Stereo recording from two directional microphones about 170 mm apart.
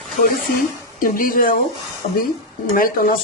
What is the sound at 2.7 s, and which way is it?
Speech, 60° left (ahead or behind).